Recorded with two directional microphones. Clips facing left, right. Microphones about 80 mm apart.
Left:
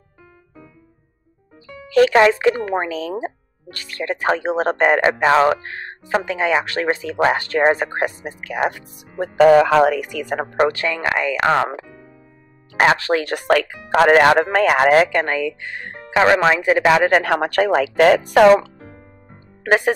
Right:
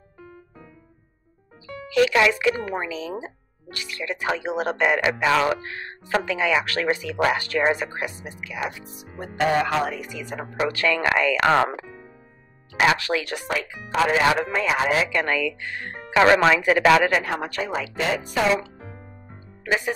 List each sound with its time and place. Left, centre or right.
1.9 s speech: left
9.8 s speech: left
10.7 s speech: left
12.7 s speech: left
13.7 s speech: left
15.2 s speech: left
17.2 s speech: left
18.8 s music: right
19.6 s speech: left